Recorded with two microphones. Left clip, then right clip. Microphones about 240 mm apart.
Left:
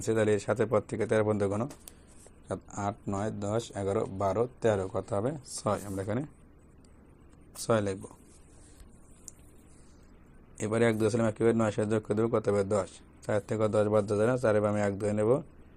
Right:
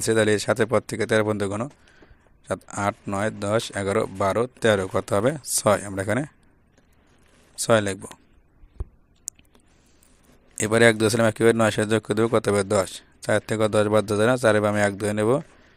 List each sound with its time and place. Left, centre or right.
0.0 s speech: right
2.5 s speech: right
5.4 s speech: right
5.9 s speech: right
7.6 s speech: right
10.6 s speech: right